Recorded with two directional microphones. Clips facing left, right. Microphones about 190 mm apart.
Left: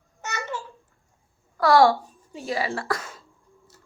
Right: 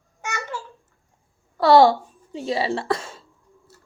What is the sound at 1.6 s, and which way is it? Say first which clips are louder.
Speech: right 3 dB; 25° right (ahead or behind).